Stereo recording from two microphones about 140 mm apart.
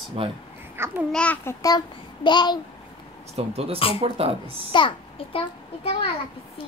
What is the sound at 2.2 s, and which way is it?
Speech, 30° left (ahead or behind).